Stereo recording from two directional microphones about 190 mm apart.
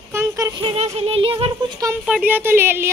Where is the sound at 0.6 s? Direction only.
35° right (ahead or behind).